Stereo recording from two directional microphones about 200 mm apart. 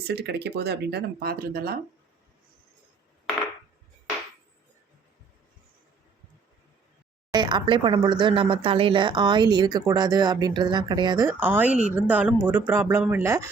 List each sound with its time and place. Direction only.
0.1 s speech: 55° right (ahead or behind)
7.3 s speech: 25° right (ahead or behind)